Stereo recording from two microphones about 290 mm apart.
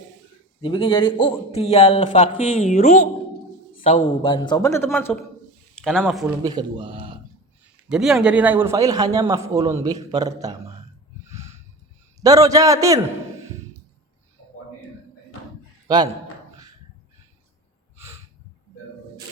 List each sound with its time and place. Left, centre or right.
0.6 s a man's voice: centre
6.4 s a man's voice: centre
7.9 s a man's voice: centre
11.3 s a sound: centre
12.2 s a man's voice: centre
17.9 s a sound: centre